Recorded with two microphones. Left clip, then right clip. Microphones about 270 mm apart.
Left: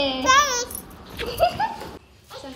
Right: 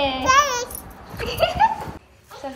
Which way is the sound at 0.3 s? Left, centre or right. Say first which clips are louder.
Even; centre.